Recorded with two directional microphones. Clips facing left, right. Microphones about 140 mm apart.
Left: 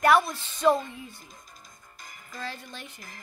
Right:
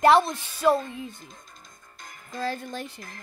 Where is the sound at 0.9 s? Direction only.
20° right (ahead or behind).